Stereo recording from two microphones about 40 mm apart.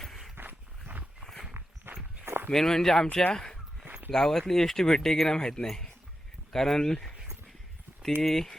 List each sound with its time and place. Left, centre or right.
0.3 s a sound: right
1.2 s walk: centre
1.5 s walk: right
2.2 s a sound: right
2.5 s speech: centre
3.3 s a sound: centre
4.1 s speech: centre
5.4 s speech: centre
8.2 s speech: centre